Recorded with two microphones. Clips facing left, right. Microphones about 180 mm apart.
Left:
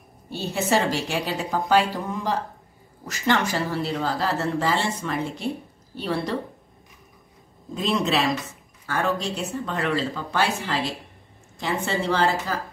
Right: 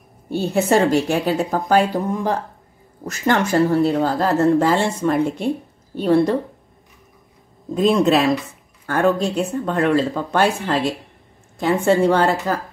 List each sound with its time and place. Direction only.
0.3 s speech: 50° right (ahead or behind)
7.7 s speech: 50° right (ahead or behind)